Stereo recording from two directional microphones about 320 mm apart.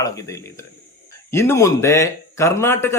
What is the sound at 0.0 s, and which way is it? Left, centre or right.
A man's voice, centre.